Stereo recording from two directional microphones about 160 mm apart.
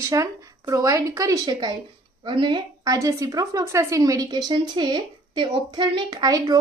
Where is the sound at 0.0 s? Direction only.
20° right (ahead or behind).